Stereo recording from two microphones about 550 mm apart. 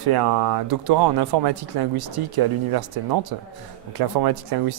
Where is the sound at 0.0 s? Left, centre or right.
Right.